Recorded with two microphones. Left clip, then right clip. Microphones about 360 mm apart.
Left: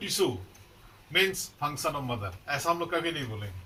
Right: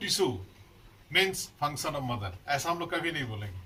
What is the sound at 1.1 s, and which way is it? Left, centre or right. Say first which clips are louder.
Speech: left 1 dB; centre.